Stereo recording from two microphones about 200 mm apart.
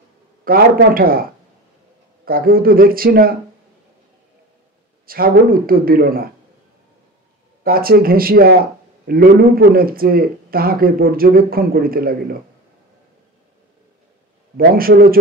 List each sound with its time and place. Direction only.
0.5 s a man's voice: 45° right (ahead or behind)
5.0 s a man's voice: 45° right (ahead or behind)
7.6 s a man's voice: 45° right (ahead or behind)
14.6 s a man's voice: 45° right (ahead or behind)